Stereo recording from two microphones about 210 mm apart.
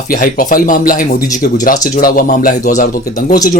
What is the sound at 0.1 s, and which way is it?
Speech, 40° left (ahead or behind).